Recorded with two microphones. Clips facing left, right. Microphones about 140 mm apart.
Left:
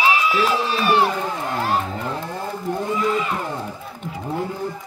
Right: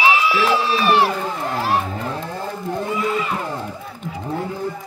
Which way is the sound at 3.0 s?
Centre (ahead or behind).